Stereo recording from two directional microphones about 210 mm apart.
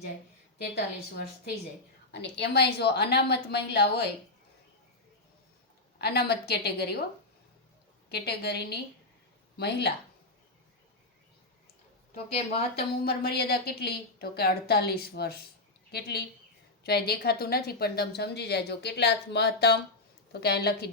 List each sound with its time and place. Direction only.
2.3 s a woman's voice: 50° left (ahead or behind)
6.0 s a woman's voice: 50° left (ahead or behind)
8.1 s a woman's voice: 50° left (ahead or behind)
12.3 s a woman's voice: 30° left (ahead or behind)
13.1 s a woman's voice: 50° left (ahead or behind)